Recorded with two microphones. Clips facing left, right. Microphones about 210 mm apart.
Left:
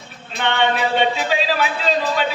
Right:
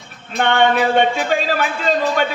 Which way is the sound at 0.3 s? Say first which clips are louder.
Right 4 dB; 50° right (ahead or behind).